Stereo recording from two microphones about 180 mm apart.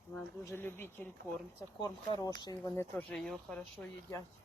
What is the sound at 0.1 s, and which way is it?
Speech, 15° left (ahead or behind).